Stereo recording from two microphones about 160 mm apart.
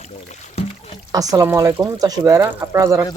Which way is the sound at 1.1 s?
20° right (ahead or behind).